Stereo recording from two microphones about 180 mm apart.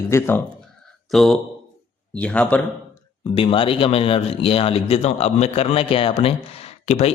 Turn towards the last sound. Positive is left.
turn(degrees=35)  # may be behind; listen again after turning